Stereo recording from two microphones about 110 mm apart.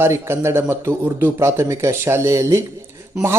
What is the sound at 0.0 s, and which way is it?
A man's voice, 25° right (ahead or behind).